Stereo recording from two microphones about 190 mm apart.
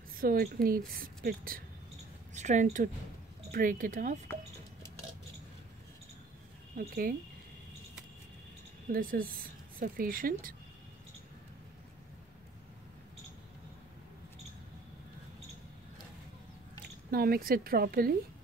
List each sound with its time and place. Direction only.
0.1 s a woman's voice: 50° right (ahead or behind)
2.3 s a woman's voice: 40° right (ahead or behind)
6.8 s a woman's voice: 50° right (ahead or behind)
8.9 s a woman's voice: 50° right (ahead or behind)
17.1 s a woman's voice: 50° right (ahead or behind)